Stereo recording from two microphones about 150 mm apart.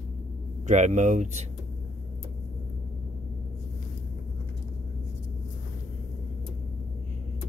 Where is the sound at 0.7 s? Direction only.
55° right (ahead or behind).